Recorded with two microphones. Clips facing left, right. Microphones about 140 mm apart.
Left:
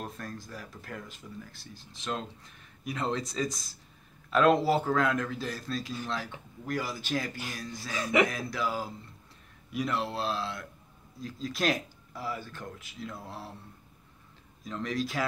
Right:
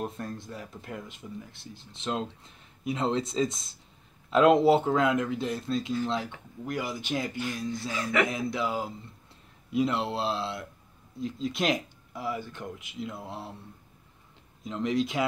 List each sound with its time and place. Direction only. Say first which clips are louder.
0.0 s speech: right 5 dB; 25° right (ahead or behind)
7.9 s speech: left 2 dB; 15° left (ahead or behind)
8.3 s speech: right 3 dB; 20° right (ahead or behind)
14.6 s speech: right 5 dB; 20° right (ahead or behind)